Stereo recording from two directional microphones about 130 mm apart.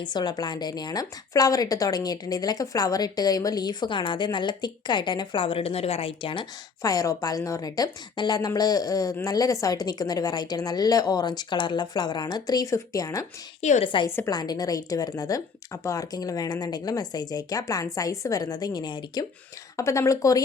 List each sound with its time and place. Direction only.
0.0 s a woman's voice: 35° left (ahead or behind)
6.8 s speech: 25° left (ahead or behind)
13.6 s a woman's voice: 60° left (ahead or behind)
13.8 s a woman's voice: 40° left (ahead or behind)
19.7 s speech: 20° left (ahead or behind)